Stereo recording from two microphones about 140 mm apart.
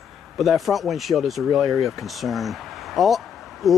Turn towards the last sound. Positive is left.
turn(degrees=0)  # may be behind; listen again after turning